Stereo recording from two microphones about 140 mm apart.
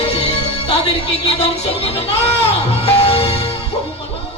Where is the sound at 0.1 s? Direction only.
50° left (ahead or behind).